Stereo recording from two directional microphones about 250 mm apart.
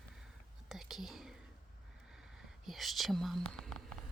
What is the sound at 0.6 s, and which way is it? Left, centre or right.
Whispering, centre.